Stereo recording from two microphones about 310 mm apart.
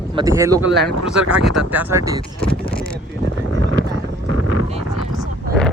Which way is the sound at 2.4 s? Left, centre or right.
Centre.